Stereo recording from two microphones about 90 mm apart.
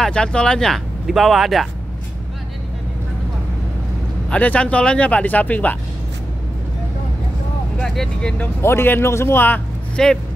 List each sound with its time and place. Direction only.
0.0 s speech: 10° left (ahead or behind)
4.3 s speech: 15° left (ahead or behind)
7.8 s speech: 5° left (ahead or behind)
8.5 s speech: 25° left (ahead or behind)
10.0 s speech: 5° left (ahead or behind)